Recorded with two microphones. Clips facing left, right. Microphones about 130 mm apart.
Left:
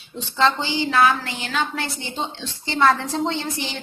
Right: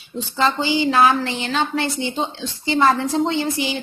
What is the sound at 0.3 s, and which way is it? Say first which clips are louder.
A woman's voice: right 1 dB; 5° right (ahead or behind).